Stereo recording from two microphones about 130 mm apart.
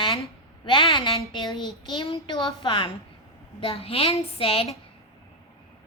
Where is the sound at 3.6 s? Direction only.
45° left (ahead or behind).